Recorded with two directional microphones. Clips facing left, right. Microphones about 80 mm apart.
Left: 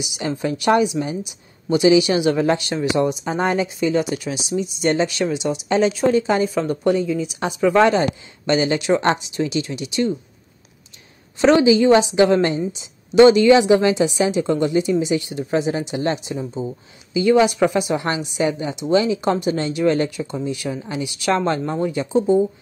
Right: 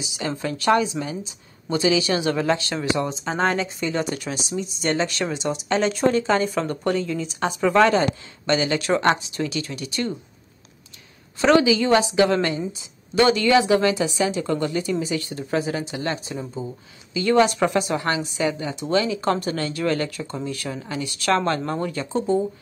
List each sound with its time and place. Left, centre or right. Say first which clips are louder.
0.4 s speech: left 3 dB; centre
6.4 s speech: left 4 dB; centre
7.8 s speech: left 2 dB; left
11.3 s speech: left 3 dB; left; by 17.9 s centre
17.9 s speech: left 2 dB; left